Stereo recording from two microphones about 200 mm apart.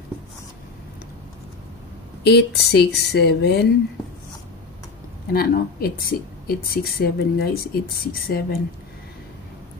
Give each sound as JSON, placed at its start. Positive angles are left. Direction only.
{"t": 2.2, "sound": "speech", "side_deg": 55}
{"t": 5.3, "sound": "speech", "side_deg": 50}